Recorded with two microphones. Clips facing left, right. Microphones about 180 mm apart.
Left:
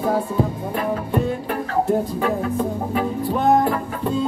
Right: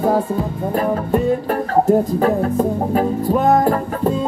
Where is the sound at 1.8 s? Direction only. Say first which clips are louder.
Right 6 dB; 40° right (ahead or behind).